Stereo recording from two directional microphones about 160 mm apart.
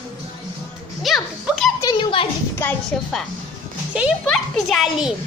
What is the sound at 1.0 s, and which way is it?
Speech, centre (ahead or behind).